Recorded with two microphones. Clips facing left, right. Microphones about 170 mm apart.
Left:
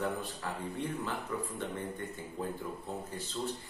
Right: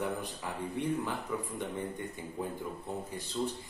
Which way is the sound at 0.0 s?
15° right (ahead or behind).